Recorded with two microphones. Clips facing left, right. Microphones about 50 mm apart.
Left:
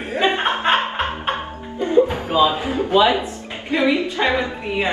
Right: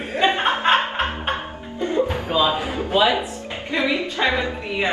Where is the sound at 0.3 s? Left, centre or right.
Left.